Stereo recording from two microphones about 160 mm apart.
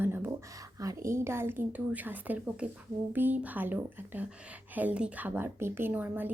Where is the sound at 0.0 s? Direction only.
15° right (ahead or behind).